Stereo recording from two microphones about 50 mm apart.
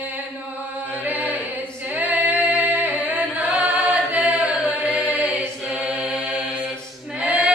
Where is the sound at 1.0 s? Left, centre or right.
Right.